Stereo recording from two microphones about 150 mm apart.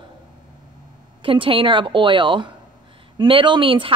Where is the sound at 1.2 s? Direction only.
35° right (ahead or behind).